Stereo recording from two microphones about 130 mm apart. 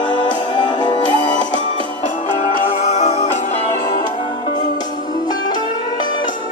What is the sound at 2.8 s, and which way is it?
Music, 60° left (ahead or behind).